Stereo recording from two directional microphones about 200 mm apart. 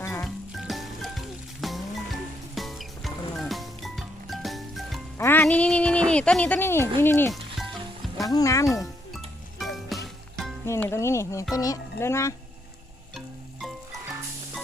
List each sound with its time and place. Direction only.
0.0 s music: 10° left (ahead or behind)
0.5 s music: centre (ahead or behind)
5.1 s music: 10° left (ahead or behind)
7.0 s speech: 10° left (ahead or behind)
7.3 s music: centre (ahead or behind)
8.2 s speech: 15° left (ahead or behind)
8.8 s music: centre (ahead or behind)
10.7 s speech: 15° left (ahead or behind)
13.1 s a sound: centre (ahead or behind)